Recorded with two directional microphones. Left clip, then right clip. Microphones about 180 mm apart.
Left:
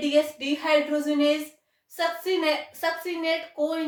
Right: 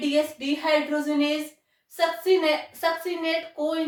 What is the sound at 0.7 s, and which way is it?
A woman's voice, 25° left (ahead or behind).